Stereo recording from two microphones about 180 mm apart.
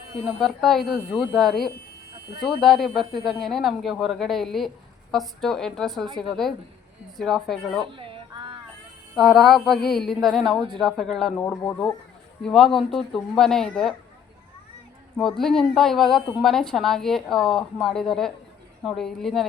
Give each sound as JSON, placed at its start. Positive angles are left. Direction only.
{"t": 0.3, "sound": "a woman's voice", "side_deg": 0}
{"t": 7.9, "sound": "a sound", "side_deg": -30}
{"t": 9.1, "sound": "a woman's voice", "side_deg": 0}
{"t": 15.4, "sound": "a woman's voice", "side_deg": 0}